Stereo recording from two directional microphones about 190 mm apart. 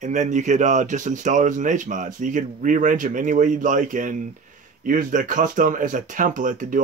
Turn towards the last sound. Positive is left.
turn(degrees=-45)  # may be behind; listen again after turning